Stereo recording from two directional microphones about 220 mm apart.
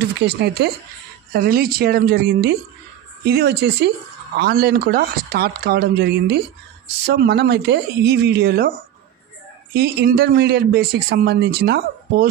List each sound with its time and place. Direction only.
0.3 s speech: 50° right (ahead or behind)